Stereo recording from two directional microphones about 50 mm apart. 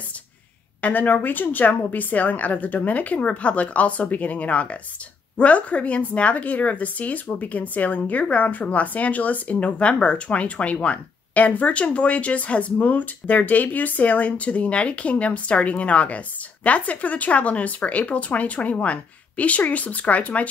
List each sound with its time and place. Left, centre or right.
0.7 s a woman's voice: left